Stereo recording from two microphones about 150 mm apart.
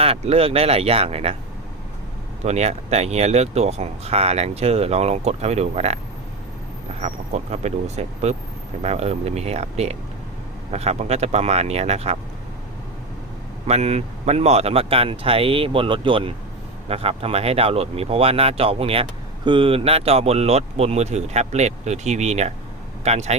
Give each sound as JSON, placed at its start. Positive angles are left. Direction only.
{"t": 0.0, "sound": "speech", "side_deg": -40}
{"t": 2.4, "sound": "speech", "side_deg": -45}
{"t": 7.0, "sound": "speech", "side_deg": -50}
{"t": 13.7, "sound": "speech", "side_deg": -45}